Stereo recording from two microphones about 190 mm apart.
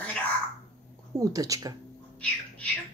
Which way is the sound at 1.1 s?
20° right (ahead or behind).